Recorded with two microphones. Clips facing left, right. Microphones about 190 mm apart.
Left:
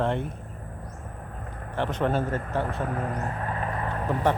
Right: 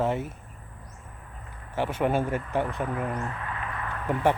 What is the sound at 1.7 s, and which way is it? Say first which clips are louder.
Speech: even; 10° right (ahead or behind).